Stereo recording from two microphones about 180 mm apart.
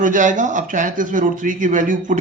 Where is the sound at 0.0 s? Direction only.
45° right (ahead or behind).